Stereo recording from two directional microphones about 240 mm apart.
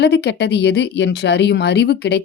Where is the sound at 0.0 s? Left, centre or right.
Left.